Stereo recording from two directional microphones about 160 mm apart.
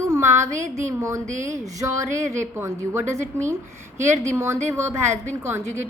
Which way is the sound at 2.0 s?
20° right (ahead or behind).